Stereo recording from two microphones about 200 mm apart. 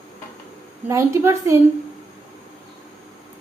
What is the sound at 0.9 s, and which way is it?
Speech, 15° right (ahead or behind).